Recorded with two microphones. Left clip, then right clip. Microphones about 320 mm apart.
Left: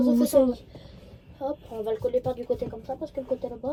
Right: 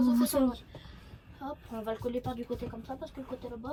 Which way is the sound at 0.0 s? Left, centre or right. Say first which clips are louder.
Left 7 dB; left.